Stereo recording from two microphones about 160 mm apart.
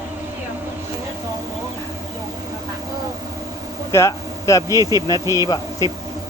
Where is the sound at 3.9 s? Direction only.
20° left (ahead or behind).